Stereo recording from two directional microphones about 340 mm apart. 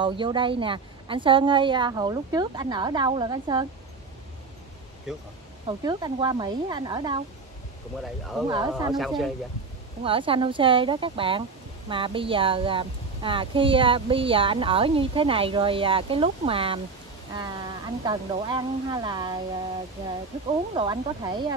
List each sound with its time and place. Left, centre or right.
0.0 s speech: centre
5.7 s speech: centre
8.0 s speech: centre
8.5 s speech: centre
10.0 s speech: centre
20.7 s speech: centre